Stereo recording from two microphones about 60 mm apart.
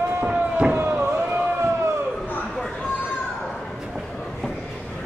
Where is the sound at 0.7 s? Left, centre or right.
Right.